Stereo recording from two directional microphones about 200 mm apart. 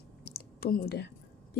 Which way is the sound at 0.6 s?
50° left (ahead or behind).